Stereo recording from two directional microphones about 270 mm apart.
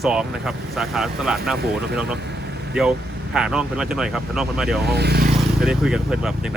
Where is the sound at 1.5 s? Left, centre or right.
Right.